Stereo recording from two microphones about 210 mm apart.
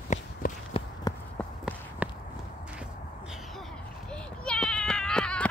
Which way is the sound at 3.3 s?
5° left (ahead or behind).